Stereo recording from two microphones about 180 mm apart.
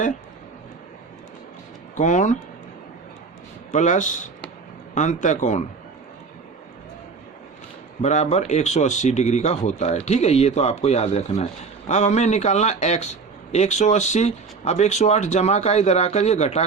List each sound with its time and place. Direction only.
2.0 s speech: 45° left (ahead or behind)
3.7 s a man's voice: 45° left (ahead or behind)
8.0 s speech: 40° left (ahead or behind)